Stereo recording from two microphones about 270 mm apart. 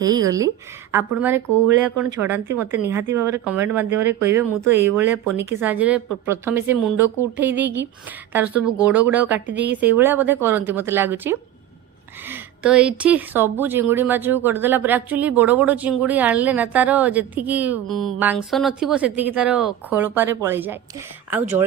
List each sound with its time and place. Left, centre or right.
0.0 s speech: centre
9.5 s a woman's voice: right
9.8 s speech: centre